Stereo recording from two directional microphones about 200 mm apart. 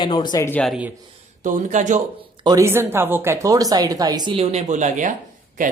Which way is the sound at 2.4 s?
15° right (ahead or behind).